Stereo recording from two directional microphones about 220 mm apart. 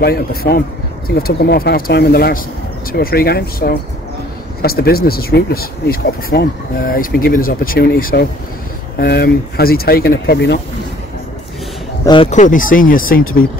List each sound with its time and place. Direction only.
0.0 s speech: 45° left (ahead or behind)
12.1 s speech: 30° left (ahead or behind)